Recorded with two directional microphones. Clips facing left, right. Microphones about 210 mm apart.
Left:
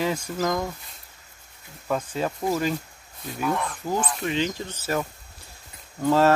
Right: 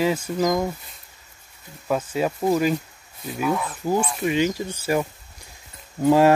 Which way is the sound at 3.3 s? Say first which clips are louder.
Right 2 dB; 5° right (ahead or behind).